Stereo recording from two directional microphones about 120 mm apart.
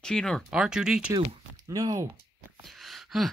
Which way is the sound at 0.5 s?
5° right (ahead or behind).